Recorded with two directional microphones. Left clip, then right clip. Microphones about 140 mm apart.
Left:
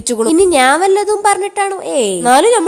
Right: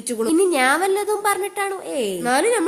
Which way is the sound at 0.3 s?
40° left (ahead or behind).